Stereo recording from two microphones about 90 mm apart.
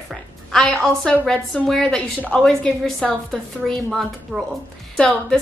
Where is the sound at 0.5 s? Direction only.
5° left (ahead or behind).